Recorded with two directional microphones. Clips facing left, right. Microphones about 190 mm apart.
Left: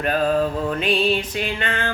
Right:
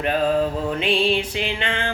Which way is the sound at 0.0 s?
20° right (ahead or behind).